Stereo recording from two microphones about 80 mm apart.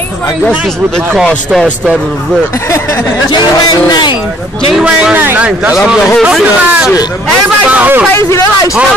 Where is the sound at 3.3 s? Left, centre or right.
Left.